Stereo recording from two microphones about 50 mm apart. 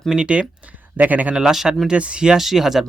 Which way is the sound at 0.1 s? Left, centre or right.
Right.